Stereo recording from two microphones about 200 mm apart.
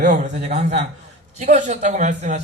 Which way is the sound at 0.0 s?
35° right (ahead or behind).